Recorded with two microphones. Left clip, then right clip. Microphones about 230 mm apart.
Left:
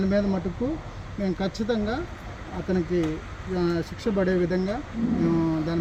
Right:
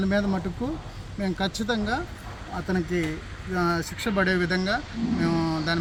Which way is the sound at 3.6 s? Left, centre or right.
Centre.